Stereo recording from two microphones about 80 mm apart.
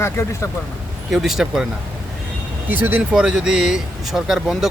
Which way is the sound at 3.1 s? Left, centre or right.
Centre.